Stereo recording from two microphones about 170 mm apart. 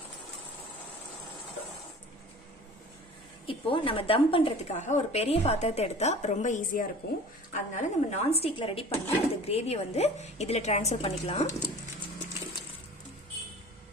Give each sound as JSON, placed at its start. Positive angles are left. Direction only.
{"t": 3.4, "sound": "a woman's voice", "side_deg": 30}
{"t": 7.7, "sound": "a woman's voice", "side_deg": 40}